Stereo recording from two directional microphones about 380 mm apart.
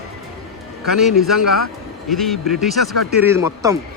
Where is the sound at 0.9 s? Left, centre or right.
Centre.